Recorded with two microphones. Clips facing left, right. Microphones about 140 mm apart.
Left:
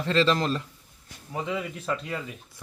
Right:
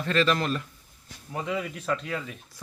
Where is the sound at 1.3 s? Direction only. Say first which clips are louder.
Even; centre (ahead or behind).